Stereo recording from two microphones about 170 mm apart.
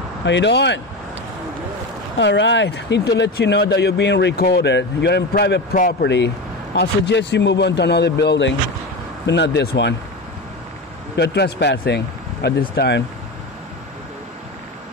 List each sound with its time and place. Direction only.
0.2 s speech: 90° left
2.1 s speech: 90° left
5.8 s speech: 55° left (ahead or behind)
6.0 s speech: 90° left
11.1 s speech: 75° left (ahead or behind)